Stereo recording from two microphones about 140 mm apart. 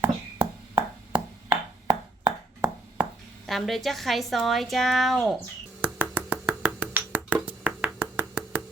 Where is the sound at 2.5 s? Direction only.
15° right (ahead or behind).